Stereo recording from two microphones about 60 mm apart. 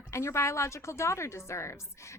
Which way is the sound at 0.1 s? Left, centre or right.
Left.